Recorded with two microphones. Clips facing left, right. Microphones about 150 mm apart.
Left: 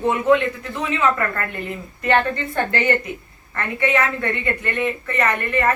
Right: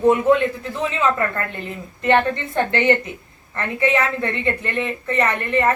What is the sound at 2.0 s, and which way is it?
Speech, 20° right (ahead or behind).